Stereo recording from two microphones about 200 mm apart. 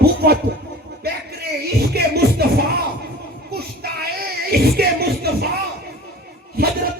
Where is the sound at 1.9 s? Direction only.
55° right (ahead or behind).